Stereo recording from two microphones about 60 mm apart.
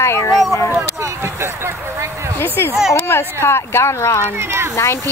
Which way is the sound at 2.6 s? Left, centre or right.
Left.